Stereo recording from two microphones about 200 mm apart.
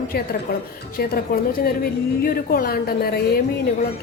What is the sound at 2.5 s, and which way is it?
Speech, 50° left (ahead or behind).